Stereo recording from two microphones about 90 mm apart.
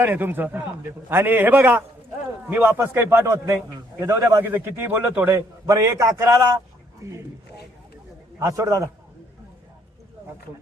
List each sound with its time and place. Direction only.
0.0 s a man's voice: 25° right (ahead or behind)
5.6 s a man's voice: 35° right (ahead or behind)
8.4 s a man's voice: 35° right (ahead or behind)